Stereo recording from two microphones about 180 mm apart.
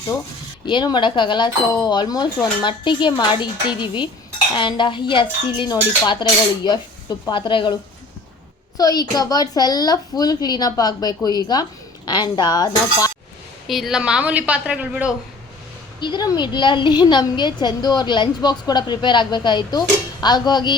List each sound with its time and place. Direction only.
0.6 s a woman's voice: 25° left (ahead or behind)
8.8 s a woman's voice: 20° left (ahead or behind)
13.7 s a woman's voice: centre (ahead or behind)
16.0 s a woman's voice: 25° left (ahead or behind)